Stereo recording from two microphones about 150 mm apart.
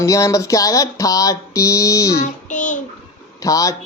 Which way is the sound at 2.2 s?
55° left (ahead or behind).